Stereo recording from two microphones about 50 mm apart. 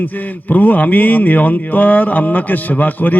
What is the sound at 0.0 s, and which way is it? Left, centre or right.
Speech, left.